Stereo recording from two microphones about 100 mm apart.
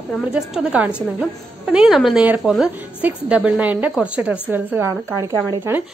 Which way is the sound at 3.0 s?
15° right (ahead or behind).